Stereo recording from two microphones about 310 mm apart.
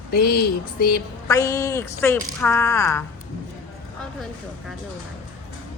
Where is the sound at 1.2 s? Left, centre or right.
Centre.